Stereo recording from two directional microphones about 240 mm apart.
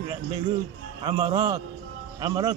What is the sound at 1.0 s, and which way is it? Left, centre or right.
A man's voice, centre.